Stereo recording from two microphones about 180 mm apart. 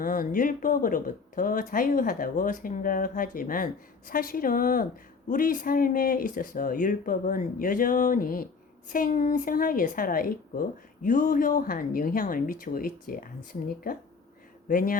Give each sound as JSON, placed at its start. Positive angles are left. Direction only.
{"t": 0.0, "sound": "a woman's voice", "side_deg": 50}